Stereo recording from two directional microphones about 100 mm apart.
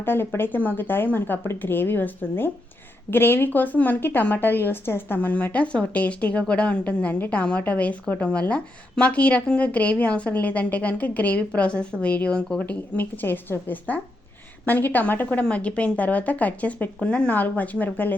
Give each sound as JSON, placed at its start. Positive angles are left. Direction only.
{"t": 0.0, "sound": "speech", "side_deg": 20}